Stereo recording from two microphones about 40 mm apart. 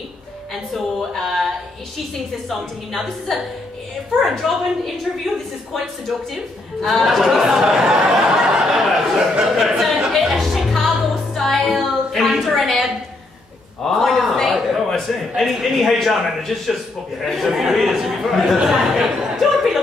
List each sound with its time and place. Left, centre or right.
0.7 s speech: centre
3.3 s a woman's voice: centre
6.8 s a woman's voice: centre
7.6 s a sound: centre
10.1 s music: centre
11.9 s a sound: centre
13.8 s a sound: centre
17.2 s a woman's voice: centre
19.3 s chuckle: centre